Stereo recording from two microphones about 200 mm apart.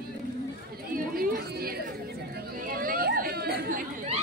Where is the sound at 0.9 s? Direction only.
50° right (ahead or behind).